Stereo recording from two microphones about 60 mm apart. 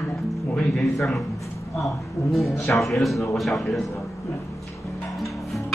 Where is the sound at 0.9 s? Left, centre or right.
Centre.